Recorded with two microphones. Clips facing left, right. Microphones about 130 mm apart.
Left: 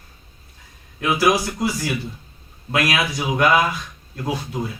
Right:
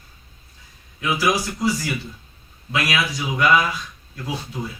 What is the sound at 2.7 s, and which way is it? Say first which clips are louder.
Speech: left 2 dB; 50° left (ahead or behind).